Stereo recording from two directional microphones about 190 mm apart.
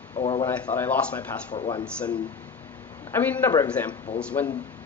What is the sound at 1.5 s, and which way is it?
Speech, 25° left (ahead or behind).